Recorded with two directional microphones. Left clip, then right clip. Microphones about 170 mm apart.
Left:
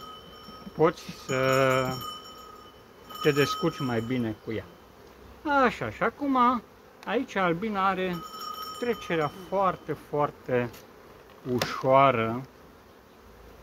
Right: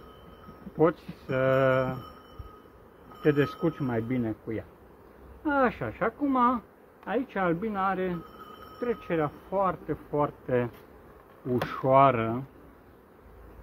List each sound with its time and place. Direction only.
0.7 s speech: 5° left (ahead or behind)
3.2 s speech: 5° left (ahead or behind)
11.6 s speech: 20° right (ahead or behind)